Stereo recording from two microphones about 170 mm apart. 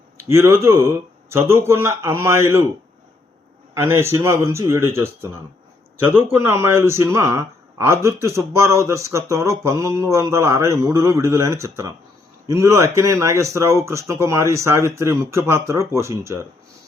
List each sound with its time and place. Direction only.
0.3 s speech: 15° right (ahead or behind)
3.8 s speech: 15° right (ahead or behind)